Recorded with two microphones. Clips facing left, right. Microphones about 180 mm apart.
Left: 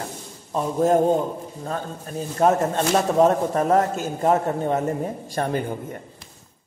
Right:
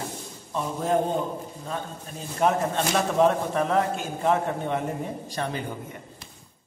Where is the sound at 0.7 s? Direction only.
45° left (ahead or behind).